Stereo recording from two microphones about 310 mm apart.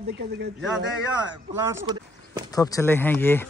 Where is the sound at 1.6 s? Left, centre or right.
Centre.